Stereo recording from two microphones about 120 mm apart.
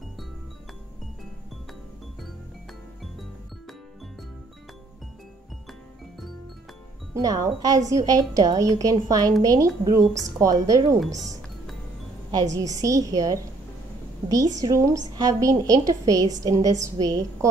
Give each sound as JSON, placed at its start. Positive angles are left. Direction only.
{"t": 7.2, "sound": "a woman's voice", "side_deg": -30}